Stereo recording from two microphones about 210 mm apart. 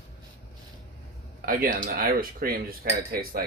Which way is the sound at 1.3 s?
40° right (ahead or behind).